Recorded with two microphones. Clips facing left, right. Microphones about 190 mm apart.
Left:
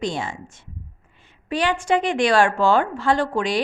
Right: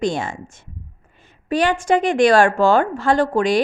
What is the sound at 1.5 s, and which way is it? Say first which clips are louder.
A woman's voice: right 3 dB; 45° right (ahead or behind).